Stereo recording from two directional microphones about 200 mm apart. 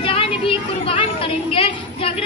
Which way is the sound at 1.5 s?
30° left (ahead or behind).